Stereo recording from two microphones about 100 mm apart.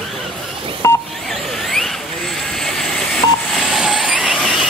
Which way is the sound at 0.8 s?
25° left (ahead or behind).